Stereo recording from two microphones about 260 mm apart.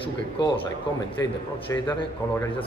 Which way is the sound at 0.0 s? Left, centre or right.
Left.